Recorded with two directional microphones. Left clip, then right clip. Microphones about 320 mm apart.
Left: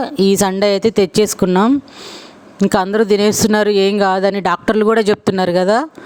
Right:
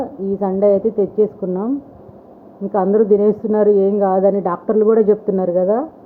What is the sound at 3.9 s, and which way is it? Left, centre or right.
Speech, left.